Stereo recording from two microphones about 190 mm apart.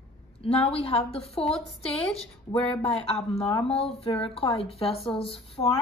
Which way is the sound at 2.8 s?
30° left (ahead or behind).